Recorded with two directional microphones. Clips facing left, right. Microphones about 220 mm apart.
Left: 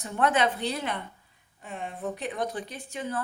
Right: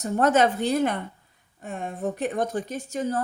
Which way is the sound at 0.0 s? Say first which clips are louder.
Right 5 dB; 40° right (ahead or behind).